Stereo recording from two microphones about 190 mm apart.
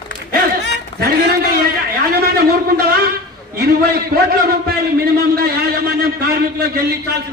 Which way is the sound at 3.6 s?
55° right (ahead or behind).